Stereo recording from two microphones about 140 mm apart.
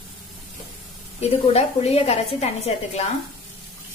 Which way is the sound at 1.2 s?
45° left (ahead or behind).